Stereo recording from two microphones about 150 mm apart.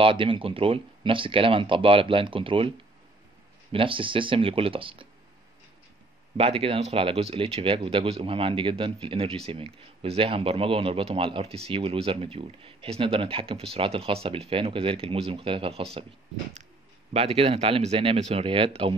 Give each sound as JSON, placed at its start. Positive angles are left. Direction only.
{"t": 0.0, "sound": "speech", "side_deg": -35}
{"t": 3.7, "sound": "speech", "side_deg": -35}
{"t": 6.3, "sound": "speech", "side_deg": -40}
{"t": 17.1, "sound": "speech", "side_deg": -40}